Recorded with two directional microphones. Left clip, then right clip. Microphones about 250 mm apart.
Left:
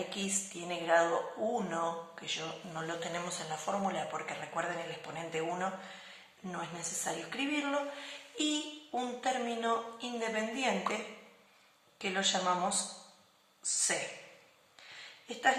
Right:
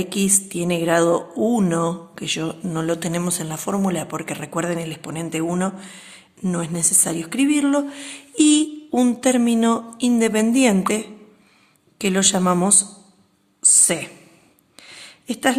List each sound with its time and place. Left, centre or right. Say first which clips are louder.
0.1 s speech: right 15 dB; right
11.9 s a woman's voice: right 12 dB; right